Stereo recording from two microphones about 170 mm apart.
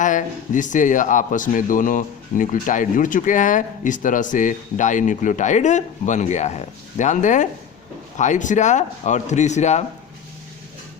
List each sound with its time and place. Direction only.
0.0 s a man's voice: 50° left (ahead or behind)